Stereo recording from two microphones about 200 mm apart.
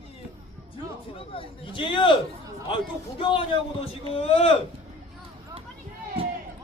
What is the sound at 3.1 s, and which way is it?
A man's voice, 25° left (ahead or behind).